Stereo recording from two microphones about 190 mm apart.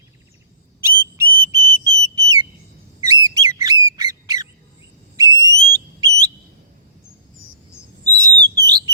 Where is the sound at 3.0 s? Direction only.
20° right (ahead or behind).